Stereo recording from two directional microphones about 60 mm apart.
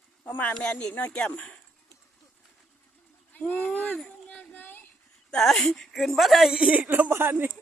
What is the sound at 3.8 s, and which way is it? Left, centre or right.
Speech, centre.